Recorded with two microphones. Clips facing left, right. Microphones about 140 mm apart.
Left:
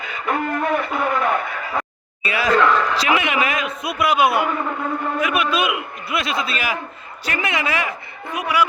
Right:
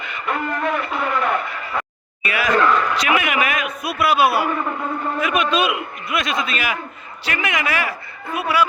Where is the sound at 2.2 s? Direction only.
25° left (ahead or behind).